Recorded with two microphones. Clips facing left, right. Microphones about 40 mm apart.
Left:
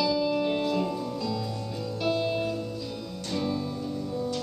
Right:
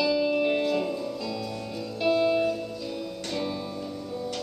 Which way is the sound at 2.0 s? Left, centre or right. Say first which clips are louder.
Right 5 dB; centre.